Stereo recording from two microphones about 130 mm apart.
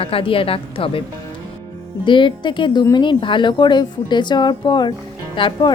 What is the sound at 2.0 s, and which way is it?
Speech, 40° left (ahead or behind).